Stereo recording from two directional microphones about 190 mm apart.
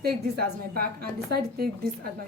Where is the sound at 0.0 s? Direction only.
55° right (ahead or behind).